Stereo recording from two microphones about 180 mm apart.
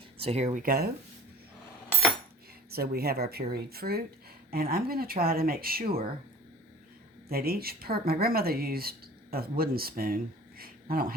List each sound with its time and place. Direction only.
0.2 s speech: 35° right (ahead or behind)
0.6 s speech: 55° right (ahead or behind)
2.6 s speech: 60° right (ahead or behind)
7.3 s speech: 60° right (ahead or behind)